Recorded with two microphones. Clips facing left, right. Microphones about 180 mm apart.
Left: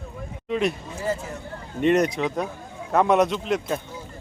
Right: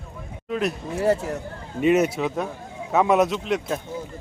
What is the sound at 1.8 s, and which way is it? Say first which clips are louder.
Speech: right 1 dB; 5° right (ahead or behind).